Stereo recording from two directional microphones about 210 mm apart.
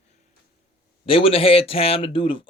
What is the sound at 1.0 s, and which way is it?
Speech, 25° left (ahead or behind).